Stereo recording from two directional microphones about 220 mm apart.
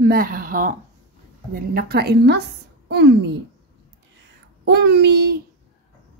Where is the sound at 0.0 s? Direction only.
40° right (ahead or behind).